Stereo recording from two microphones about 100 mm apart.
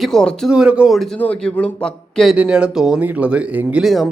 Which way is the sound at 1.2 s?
15° left (ahead or behind).